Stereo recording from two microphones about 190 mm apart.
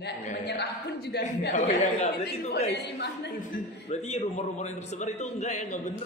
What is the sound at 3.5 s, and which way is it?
A man's voice, 35° left (ahead or behind).